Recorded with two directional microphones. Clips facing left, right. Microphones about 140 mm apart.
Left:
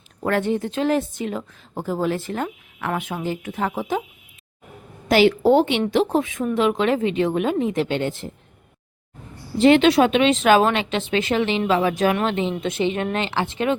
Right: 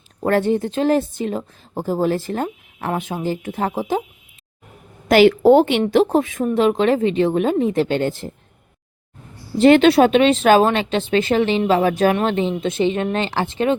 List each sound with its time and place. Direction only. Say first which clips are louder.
0.3 s a woman's voice: right 4 dB; 35° right (ahead or behind)
5.0 s a woman's voice: right 4 dB; 50° right (ahead or behind)
5.8 s a woman's voice: right 4 dB; 40° right (ahead or behind)
9.6 s a woman's voice: right 3 dB; 45° right (ahead or behind)